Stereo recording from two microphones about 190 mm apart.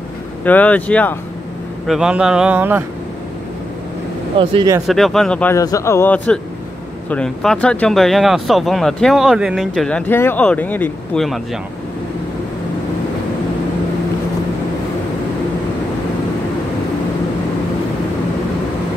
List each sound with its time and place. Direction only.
0.5 s a man's voice: 10° left (ahead or behind)
1.9 s speech: 5° right (ahead or behind)
4.4 s speech: 25° right (ahead or behind)
4.8 s a man's voice: centre (ahead or behind)